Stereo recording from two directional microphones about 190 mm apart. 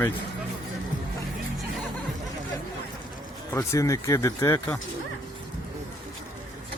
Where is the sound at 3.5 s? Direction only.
15° left (ahead or behind).